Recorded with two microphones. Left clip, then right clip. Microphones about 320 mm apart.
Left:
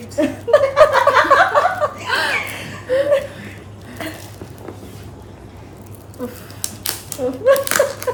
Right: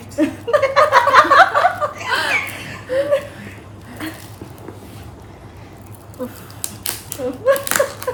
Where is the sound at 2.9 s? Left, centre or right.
Centre.